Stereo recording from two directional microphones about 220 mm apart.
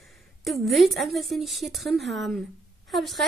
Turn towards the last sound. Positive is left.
turn(degrees=0)  # may be behind; listen again after turning